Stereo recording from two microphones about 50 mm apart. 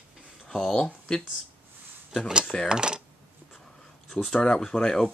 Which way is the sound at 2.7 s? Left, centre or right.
Centre.